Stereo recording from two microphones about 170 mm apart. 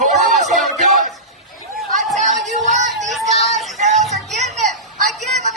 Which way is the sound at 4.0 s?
Centre (ahead or behind).